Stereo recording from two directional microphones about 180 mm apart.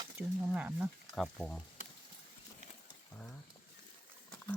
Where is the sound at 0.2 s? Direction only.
10° right (ahead or behind).